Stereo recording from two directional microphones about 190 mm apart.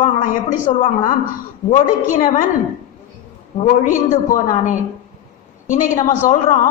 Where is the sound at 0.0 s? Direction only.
40° left (ahead or behind).